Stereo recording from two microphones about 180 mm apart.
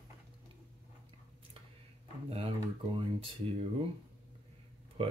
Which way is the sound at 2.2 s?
35° right (ahead or behind).